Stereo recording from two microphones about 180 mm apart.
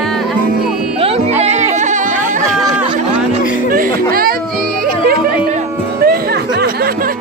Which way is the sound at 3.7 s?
55° right (ahead or behind).